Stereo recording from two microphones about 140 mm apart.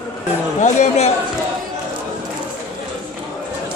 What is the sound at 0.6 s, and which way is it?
Speech, 55° left (ahead or behind).